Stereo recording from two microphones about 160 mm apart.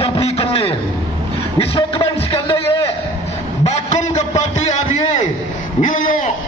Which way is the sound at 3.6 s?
45° left (ahead or behind).